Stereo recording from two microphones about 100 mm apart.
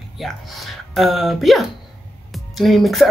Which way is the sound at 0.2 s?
Centre (ahead or behind).